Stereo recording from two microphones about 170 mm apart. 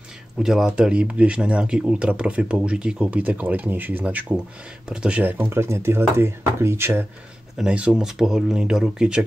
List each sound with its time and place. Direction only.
0.4 s speech: 5° right (ahead or behind)